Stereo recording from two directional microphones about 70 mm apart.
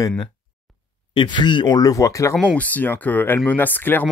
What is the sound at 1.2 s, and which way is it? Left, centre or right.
Speech, left.